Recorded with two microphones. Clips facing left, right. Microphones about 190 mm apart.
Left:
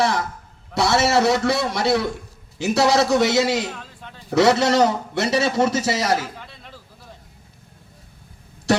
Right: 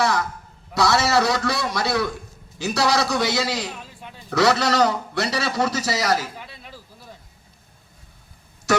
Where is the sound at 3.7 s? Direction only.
10° right (ahead or behind).